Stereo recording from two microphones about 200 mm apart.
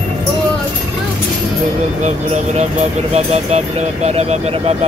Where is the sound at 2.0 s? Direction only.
35° right (ahead or behind).